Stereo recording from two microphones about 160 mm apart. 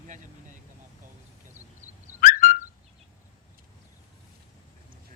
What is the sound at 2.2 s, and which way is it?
Whistling, 55° left (ahead or behind).